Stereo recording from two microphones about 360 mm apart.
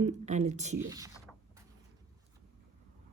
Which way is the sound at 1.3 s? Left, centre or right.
Centre.